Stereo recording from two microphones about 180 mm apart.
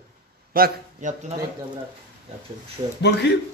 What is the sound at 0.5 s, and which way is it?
Speech, 55° right (ahead or behind).